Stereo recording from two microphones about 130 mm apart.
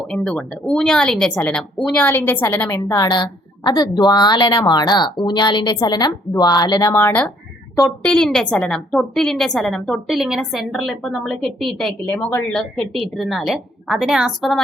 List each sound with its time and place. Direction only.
0.1 s a woman's voice: 5° left (ahead or behind); by 6.9 s 30° left (ahead or behind)
6.9 s speech: 15° left (ahead or behind)
8.0 s a woman's voice: 5° left (ahead or behind)
12.0 s a woman's voice: 15° left (ahead or behind); by 14.6 s centre (ahead or behind)